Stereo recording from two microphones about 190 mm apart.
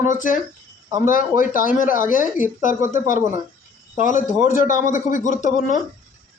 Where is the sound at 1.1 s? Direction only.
45° left (ahead or behind).